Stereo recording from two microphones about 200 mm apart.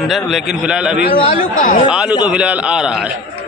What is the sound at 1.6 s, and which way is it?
Speech, 40° left (ahead or behind).